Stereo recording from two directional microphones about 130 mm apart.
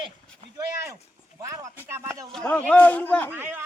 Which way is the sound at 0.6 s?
25° right (ahead or behind).